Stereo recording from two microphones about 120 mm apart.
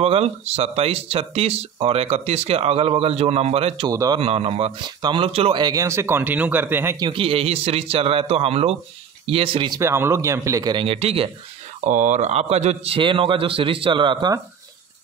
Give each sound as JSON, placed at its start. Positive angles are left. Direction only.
{"t": 0.0, "sound": "speech", "side_deg": -55}
{"t": 3.9, "sound": "speech", "side_deg": -30}
{"t": 4.2, "sound": "speech", "side_deg": -55}
{"t": 4.8, "sound": "speech", "side_deg": -35}
{"t": 5.2, "sound": "a man's voice", "side_deg": -55}
{"t": 5.6, "sound": "speech", "side_deg": -30}
{"t": 7.0, "sound": "a man's voice", "side_deg": -45}
{"t": 9.8, "sound": "speech", "side_deg": -25}
{"t": 10.7, "sound": "a man's voice", "side_deg": -50}
{"t": 11.9, "sound": "a man's voice", "side_deg": -90}